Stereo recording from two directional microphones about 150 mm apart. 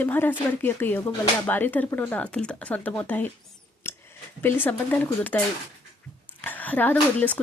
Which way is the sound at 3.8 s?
15° left (ahead or behind).